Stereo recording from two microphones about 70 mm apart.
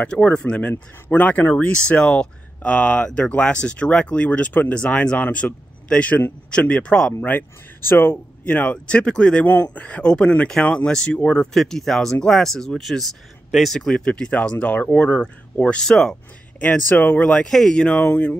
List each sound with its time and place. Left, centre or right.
0.0 s speech: centre
0.7 s speech: left
7.2 s speech: left
8.5 s speech: left
11.5 s speech: centre
15.8 s speech: centre
16.5 s speech: left